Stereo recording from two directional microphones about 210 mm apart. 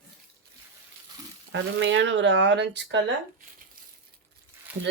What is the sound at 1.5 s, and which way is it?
Speech, 60° right (ahead or behind).